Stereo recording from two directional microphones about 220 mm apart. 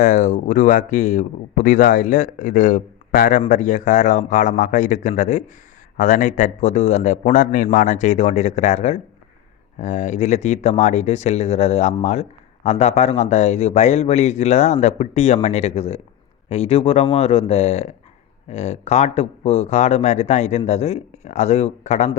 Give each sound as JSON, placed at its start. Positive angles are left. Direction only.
{"t": 0.0, "sound": "speech", "side_deg": 35}